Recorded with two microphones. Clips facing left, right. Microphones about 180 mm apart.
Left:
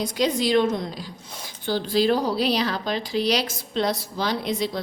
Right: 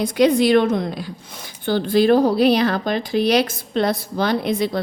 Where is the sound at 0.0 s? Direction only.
60° right (ahead or behind).